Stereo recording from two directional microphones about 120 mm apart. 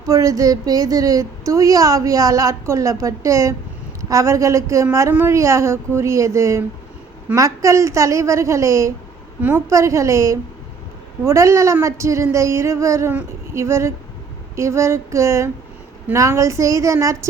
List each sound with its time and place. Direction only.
0.0 s speech: 30° right (ahead or behind)
13.1 s a sound: 25° right (ahead or behind)
14.5 s speech: 25° right (ahead or behind)